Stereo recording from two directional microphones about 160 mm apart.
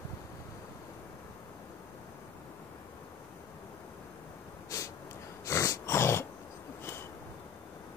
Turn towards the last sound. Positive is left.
turn(degrees=15)  # may be behind; listen again after turning